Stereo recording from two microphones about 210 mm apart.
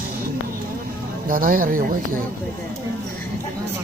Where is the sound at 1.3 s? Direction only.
40° right (ahead or behind).